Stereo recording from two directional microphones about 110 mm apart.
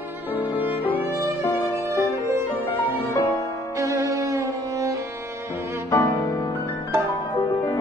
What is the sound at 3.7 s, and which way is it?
Music, 30° right (ahead or behind).